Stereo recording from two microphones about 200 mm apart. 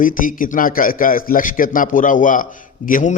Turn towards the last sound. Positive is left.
turn(degrees=45)  # may be behind; listen again after turning